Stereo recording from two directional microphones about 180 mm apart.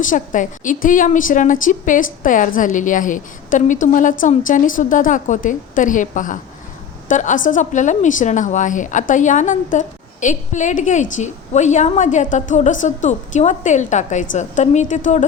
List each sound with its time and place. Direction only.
0.0 s a woman's voice: 45° left (ahead or behind)